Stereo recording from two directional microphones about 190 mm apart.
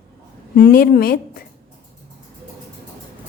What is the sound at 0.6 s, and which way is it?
Speech, 50° left (ahead or behind).